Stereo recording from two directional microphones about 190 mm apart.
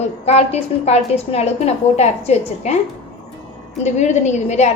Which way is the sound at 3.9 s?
35° left (ahead or behind).